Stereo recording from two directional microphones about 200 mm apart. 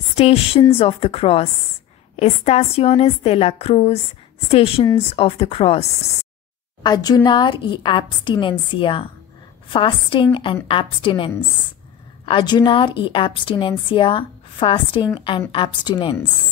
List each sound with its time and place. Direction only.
0.1 s a woman's voice: 30° left (ahead or behind)